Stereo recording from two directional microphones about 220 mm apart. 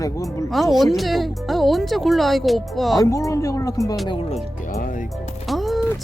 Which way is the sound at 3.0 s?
15° left (ahead or behind).